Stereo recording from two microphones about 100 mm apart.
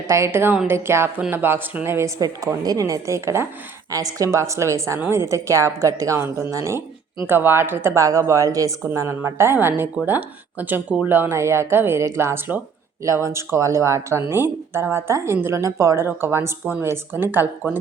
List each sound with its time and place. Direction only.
0.1 s speech: 25° right (ahead or behind)
2.1 s a woman's voice: 35° right (ahead or behind)
8.8 s speech: 25° right (ahead or behind)